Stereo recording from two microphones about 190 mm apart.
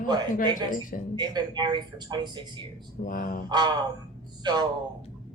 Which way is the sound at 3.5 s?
25° right (ahead or behind).